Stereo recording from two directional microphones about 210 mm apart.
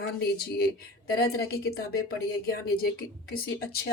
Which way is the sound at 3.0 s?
45° left (ahead or behind).